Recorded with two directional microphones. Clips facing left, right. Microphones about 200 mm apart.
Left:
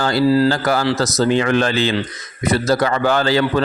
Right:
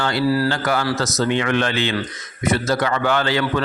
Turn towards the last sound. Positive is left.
turn(degrees=35)  # may be behind; listen again after turning